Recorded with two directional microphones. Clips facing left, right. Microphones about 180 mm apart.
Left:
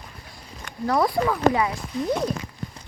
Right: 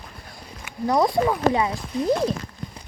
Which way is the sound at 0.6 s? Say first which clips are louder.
Right 2 dB; 15° right (ahead or behind).